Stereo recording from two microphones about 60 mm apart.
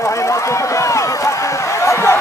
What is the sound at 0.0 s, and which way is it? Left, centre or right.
Run, left.